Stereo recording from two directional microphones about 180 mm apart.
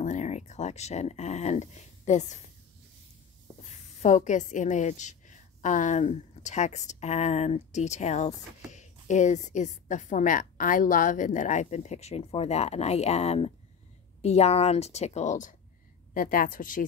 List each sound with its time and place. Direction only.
0.0 s speech: 40° left (ahead or behind)
3.6 s a woman's voice: 40° left (ahead or behind)